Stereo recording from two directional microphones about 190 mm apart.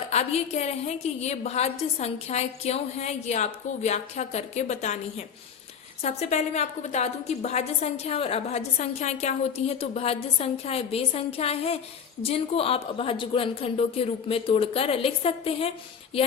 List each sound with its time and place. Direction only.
0.1 s a woman's voice: 35° left (ahead or behind)